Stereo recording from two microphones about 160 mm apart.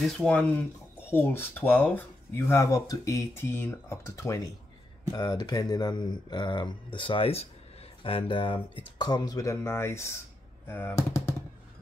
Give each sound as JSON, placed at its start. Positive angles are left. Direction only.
{"t": 0.0, "sound": "speech", "side_deg": 5}